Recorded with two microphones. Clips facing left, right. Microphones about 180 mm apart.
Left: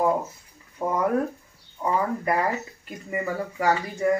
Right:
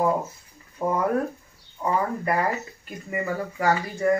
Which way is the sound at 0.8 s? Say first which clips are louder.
Right 1 dB; centre (ahead or behind).